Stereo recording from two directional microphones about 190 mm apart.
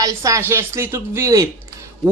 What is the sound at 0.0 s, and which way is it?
A woman's voice, 15° right (ahead or behind).